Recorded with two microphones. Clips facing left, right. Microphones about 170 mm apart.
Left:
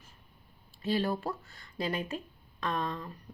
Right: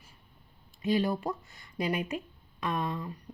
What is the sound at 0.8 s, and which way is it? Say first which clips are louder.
Speech: right 2 dB; 15° right (ahead or behind).